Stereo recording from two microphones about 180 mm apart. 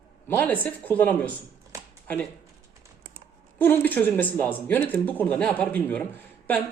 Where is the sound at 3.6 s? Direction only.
10° left (ahead or behind).